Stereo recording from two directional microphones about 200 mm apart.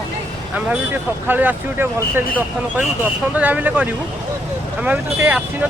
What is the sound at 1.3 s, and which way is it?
Speech, 10° right (ahead or behind).